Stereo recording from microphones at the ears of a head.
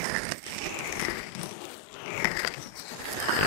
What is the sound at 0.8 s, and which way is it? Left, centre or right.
Biting, left.